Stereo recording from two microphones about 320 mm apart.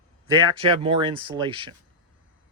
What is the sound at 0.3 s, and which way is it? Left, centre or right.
Speech, centre.